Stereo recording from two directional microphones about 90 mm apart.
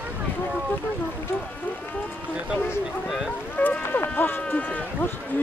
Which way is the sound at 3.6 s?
20° left (ahead or behind).